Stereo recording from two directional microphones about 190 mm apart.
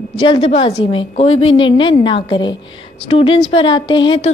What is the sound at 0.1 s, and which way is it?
A woman's voice, 25° left (ahead or behind).